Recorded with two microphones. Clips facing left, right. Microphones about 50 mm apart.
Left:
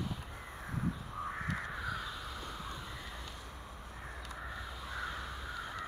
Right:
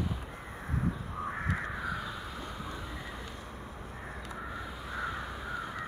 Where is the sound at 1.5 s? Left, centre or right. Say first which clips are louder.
Right 4 dB; centre.